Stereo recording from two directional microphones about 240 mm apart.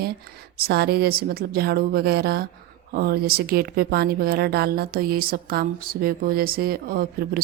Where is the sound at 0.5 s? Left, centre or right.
Right.